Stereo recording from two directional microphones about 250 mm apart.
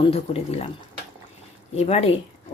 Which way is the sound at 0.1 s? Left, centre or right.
Left.